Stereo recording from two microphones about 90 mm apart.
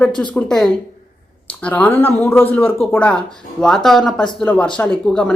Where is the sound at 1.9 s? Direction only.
25° left (ahead or behind).